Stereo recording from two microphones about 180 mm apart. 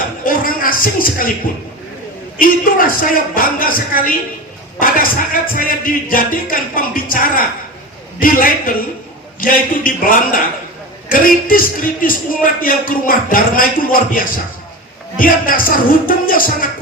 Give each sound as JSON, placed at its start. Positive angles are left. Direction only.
{"t": 0.3, "sound": "music", "side_deg": 50}
{"t": 2.4, "sound": "music", "side_deg": 50}